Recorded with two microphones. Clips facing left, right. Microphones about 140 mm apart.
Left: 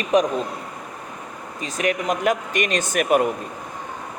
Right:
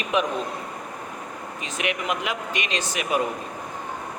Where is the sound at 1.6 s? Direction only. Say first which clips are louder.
Left 5 dB; 40° left (ahead or behind).